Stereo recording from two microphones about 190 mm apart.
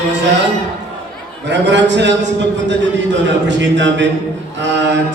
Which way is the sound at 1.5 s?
65° right (ahead or behind).